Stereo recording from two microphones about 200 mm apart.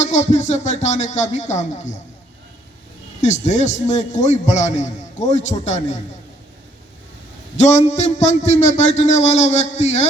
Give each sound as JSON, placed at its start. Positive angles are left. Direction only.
{"t": 0.0, "sound": "a man's voice", "side_deg": 35}
{"t": 3.2, "sound": "a man's voice", "side_deg": 35}
{"t": 7.5, "sound": "a man's voice", "side_deg": 35}